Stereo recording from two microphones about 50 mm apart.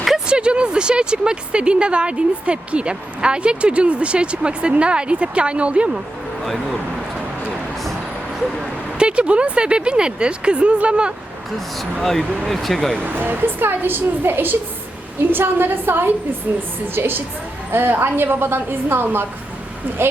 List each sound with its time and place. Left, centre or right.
0.3 s speech: centre
6.4 s speech: centre
9.0 s speech: right
12.5 s speech: centre
13.0 s a woman's voice: right